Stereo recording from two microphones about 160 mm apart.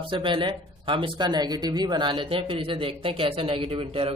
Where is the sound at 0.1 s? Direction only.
30° right (ahead or behind).